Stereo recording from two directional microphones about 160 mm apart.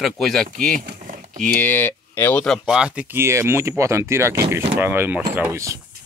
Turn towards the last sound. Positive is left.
turn(degrees=-20)  # may be behind; listen again after turning